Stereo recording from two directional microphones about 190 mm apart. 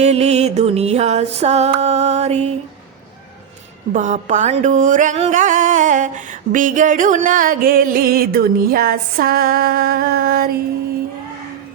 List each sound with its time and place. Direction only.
0.0 s music: 35° right (ahead or behind)
3.9 s music: 40° right (ahead or behind)